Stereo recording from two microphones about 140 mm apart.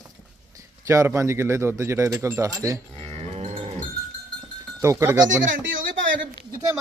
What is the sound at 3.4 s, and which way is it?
Livestock, 45° right (ahead or behind).